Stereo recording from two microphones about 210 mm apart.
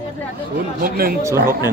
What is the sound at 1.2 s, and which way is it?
Speech, 15° right (ahead or behind).